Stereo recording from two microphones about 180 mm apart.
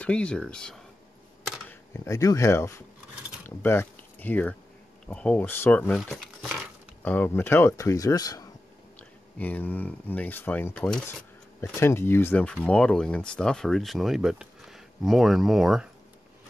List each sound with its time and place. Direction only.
0.0 s speech: 5° left (ahead or behind)
1.4 s computer keyboard: 10° left (ahead or behind)
3.4 s speech: 10° left (ahead or behind)
11.6 s speech: 15° left (ahead or behind); by 15.9 s centre (ahead or behind)